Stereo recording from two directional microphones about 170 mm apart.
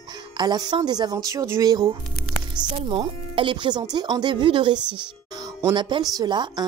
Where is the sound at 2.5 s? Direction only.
30° right (ahead or behind).